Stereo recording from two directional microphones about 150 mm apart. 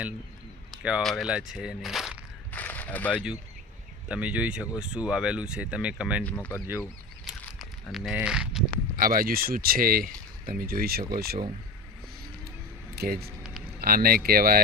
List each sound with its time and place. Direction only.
0.8 s speech: 5° right (ahead or behind)
2.5 s a sound: 10° left (ahead or behind)
4.1 s speech: 10° right (ahead or behind)
6.2 s speech: 10° left (ahead or behind)
7.3 s a sound: centre (ahead or behind)
9.0 s speech: 75° right (ahead or behind)
13.0 s speech: 90° right